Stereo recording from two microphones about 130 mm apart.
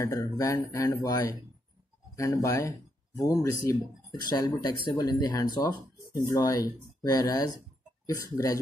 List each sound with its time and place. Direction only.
0.0 s speech: 25° left (ahead or behind)
2.1 s speech: 25° left (ahead or behind)